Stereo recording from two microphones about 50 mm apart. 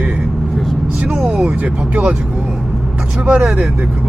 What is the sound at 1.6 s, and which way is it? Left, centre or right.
Speech, right.